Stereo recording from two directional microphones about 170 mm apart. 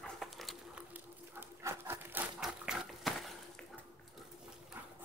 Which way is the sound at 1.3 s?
15° right (ahead or behind).